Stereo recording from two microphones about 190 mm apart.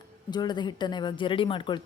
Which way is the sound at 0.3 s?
20° left (ahead or behind).